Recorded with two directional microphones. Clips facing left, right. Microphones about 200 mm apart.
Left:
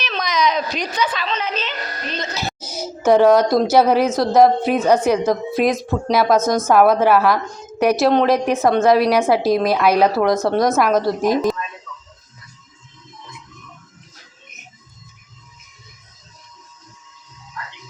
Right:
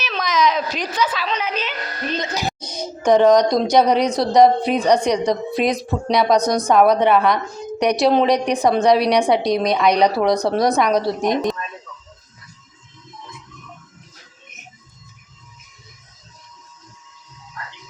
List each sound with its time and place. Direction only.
0.0 s a sound: 5° right (ahead or behind)
2.1 s speech: 15° right (ahead or behind)
2.6 s a woman's voice: 5° left (ahead or behind)
7.4 s a woman's voice: 5° right (ahead or behind)
7.8 s a woman's voice: 5° left (ahead or behind)